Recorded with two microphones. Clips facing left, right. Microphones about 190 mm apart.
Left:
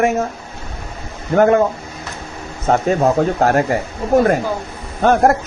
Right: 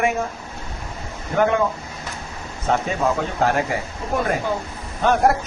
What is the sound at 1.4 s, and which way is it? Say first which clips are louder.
Speech: left 7 dB; 45° left (ahead or behind).